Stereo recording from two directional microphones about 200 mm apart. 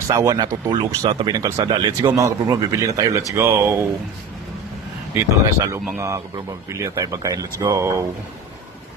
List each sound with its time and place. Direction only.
0.1 s speech: 15° right (ahead or behind)
5.1 s speech: 15° right (ahead or behind)